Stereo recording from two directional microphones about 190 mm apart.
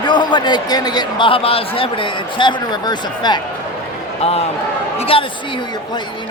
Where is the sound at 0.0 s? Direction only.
25° left (ahead or behind).